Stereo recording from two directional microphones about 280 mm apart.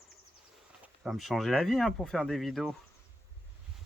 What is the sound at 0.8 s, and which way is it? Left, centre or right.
Speech, centre.